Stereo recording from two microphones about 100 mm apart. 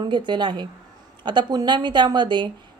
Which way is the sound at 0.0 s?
50° right (ahead or behind).